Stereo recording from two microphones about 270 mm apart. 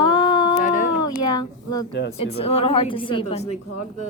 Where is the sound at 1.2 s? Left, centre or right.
Centre.